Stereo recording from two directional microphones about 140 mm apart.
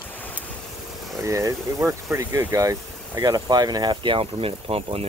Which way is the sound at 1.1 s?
20° right (ahead or behind).